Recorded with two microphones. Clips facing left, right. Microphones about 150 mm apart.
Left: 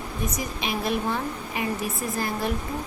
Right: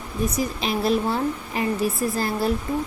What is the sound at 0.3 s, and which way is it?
A woman's voice, 35° right (ahead or behind).